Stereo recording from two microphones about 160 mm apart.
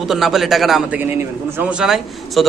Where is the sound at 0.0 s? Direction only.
Centre (ahead or behind).